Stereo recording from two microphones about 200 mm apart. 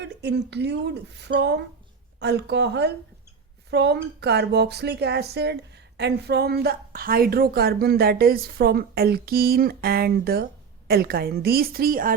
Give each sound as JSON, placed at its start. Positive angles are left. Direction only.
{"t": 0.0, "sound": "speech", "side_deg": -60}